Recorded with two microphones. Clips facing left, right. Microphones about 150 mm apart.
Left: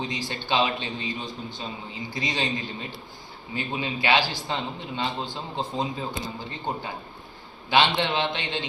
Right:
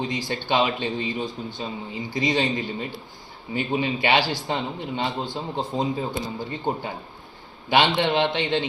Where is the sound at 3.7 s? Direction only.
55° right (ahead or behind).